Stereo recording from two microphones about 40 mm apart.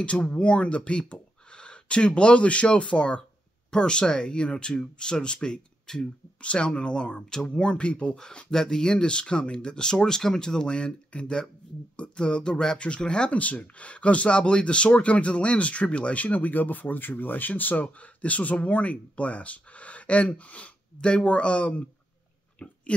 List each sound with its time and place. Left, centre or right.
0.0 s speech: left
7.2 s speech: centre
13.3 s speech: left
22.6 s a sound: left